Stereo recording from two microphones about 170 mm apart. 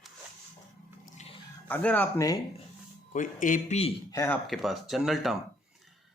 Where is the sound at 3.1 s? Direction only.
50° left (ahead or behind).